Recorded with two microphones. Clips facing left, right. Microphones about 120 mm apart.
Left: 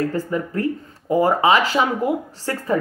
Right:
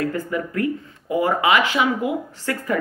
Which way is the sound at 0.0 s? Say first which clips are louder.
Left 2 dB; 35° left (ahead or behind).